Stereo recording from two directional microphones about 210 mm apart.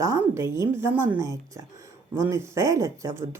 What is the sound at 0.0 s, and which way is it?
Speech, 15° right (ahead or behind).